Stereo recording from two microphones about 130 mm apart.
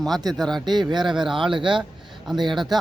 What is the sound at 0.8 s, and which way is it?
Speech, 35° right (ahead or behind).